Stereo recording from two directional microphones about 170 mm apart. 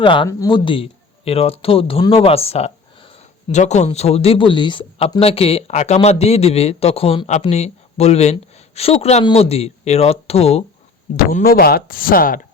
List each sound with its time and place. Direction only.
0.0 s a man's voice: 30° left (ahead or behind)
11.3 s speech: 55° left (ahead or behind)